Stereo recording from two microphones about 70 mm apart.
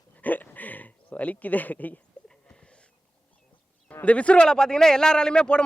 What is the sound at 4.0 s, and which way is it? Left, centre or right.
A man's voice, centre.